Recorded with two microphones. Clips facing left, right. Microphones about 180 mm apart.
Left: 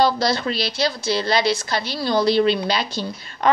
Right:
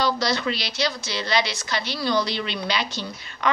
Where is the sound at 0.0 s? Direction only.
35° left (ahead or behind).